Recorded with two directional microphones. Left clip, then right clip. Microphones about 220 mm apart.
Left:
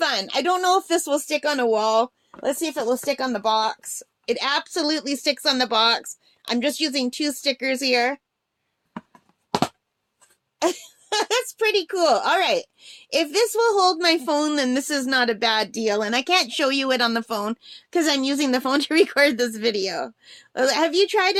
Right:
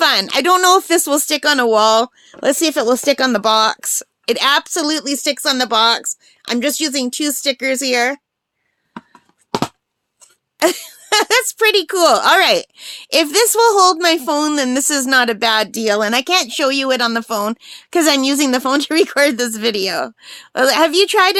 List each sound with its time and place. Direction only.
0.0 s speech: 35° right (ahead or behind)
9.5 s a sound: 10° right (ahead or behind)
10.6 s speech: 40° right (ahead or behind)